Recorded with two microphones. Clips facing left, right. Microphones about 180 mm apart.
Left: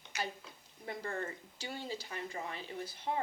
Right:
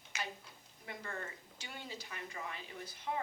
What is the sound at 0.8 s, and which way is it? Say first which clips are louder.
Speech: left 6 dB; 35° left (ahead or behind).